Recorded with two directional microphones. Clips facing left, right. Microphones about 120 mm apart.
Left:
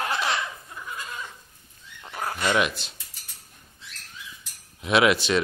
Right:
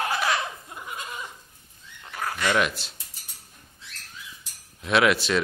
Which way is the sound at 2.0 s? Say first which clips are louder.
Even; 20° left (ahead or behind).